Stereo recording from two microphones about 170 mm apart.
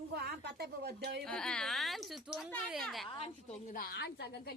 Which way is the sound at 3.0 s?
35° left (ahead or behind).